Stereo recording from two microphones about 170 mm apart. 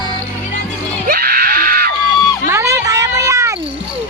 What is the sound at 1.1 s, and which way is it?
Screaming, 60° right (ahead or behind).